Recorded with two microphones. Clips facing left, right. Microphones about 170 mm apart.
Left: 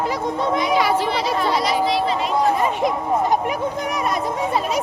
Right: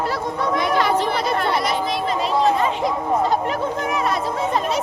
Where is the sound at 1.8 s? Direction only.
45° right (ahead or behind).